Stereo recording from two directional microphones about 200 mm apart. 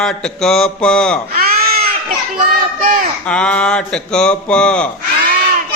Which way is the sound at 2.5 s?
45° right (ahead or behind).